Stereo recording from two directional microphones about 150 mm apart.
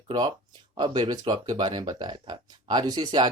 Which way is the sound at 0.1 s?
25° right (ahead or behind).